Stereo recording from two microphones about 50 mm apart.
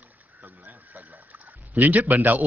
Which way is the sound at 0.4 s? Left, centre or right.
Right.